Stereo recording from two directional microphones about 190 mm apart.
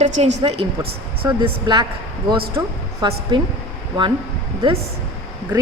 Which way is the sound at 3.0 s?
20° right (ahead or behind).